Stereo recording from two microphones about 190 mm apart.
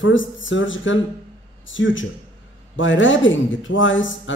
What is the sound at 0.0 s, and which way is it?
Speech, 85° left.